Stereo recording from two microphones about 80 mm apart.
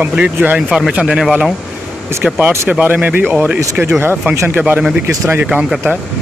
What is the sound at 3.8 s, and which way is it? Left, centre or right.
Speech, right.